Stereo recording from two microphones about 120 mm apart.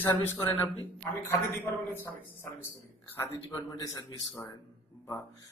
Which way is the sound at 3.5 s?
30° left (ahead or behind).